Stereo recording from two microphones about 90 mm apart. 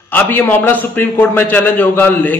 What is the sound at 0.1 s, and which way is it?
A man's voice, 20° left (ahead or behind).